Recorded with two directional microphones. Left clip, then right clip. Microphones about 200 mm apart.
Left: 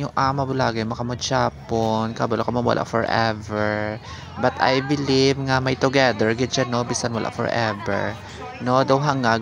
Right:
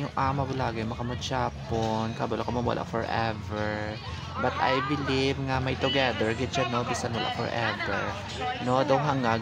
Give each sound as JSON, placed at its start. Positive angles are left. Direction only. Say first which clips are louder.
{"t": 0.1, "sound": "speech", "louder": "left 8 dB", "side_deg": 30}